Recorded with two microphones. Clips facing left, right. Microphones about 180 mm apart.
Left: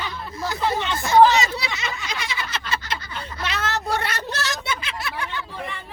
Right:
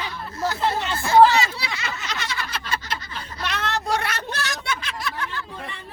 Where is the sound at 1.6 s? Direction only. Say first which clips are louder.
Left 1 dB; 15° left (ahead or behind).